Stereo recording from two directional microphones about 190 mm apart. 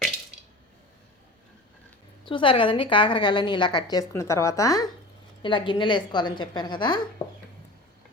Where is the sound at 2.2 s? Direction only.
25° left (ahead or behind).